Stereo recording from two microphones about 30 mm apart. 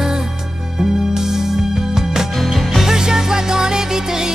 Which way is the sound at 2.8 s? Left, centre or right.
Centre.